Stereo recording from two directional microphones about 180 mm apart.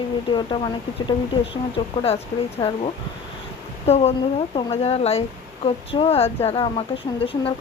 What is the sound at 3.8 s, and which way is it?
Speech, 35° left (ahead or behind).